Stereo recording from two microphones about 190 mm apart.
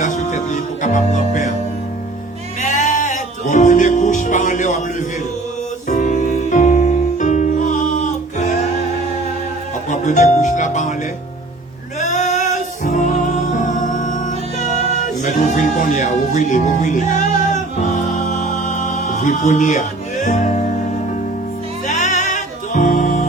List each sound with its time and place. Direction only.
0.0 s music: 40° left (ahead or behind)
2.6 s music: 40° left (ahead or behind)
9.9 s music: 40° left (ahead or behind)
11.9 s music: 40° left (ahead or behind)
21.8 s music: 40° left (ahead or behind)